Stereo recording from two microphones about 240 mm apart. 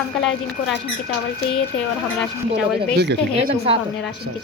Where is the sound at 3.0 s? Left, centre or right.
Right.